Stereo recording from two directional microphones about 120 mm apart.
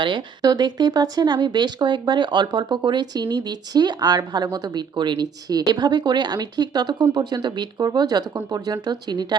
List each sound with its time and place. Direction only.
0.0 s speech: 40° right (ahead or behind)